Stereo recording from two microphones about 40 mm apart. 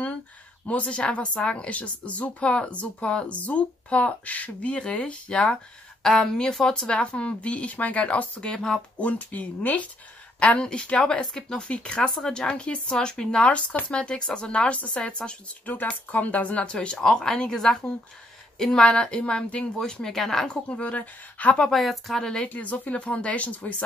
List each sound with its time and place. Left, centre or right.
0.7 s speech: left
3.3 s speech: left
8.5 s speech: centre
8.9 s speech: left
10.6 s speech: left
13.5 s speech: left
15.6 s speech: left
17.0 s speech: centre
20.4 s speech: left
21.7 s speech: centre
22.5 s speech: left